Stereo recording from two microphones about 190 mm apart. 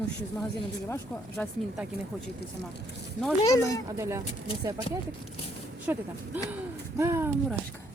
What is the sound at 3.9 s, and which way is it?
Speech, 15° right (ahead or behind).